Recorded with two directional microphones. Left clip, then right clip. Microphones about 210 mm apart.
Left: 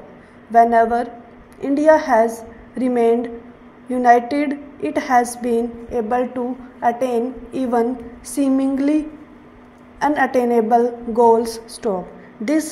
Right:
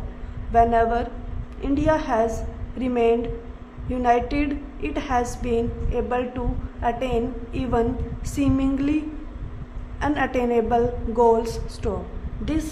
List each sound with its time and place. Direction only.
0.5 s a woman's voice: 15° left (ahead or behind)